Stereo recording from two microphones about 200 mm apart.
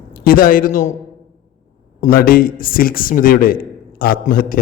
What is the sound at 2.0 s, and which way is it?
A man's voice, 45° left (ahead or behind).